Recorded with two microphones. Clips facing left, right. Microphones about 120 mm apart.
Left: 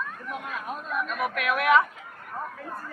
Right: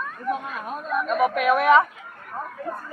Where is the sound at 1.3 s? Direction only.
35° right (ahead or behind).